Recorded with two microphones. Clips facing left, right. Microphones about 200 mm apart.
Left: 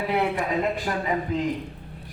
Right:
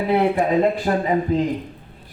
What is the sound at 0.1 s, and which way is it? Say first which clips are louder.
A man's voice: right 8 dB; 35° right (ahead or behind).